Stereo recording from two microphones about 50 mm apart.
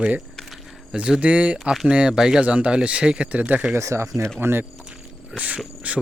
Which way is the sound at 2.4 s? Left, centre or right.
Right.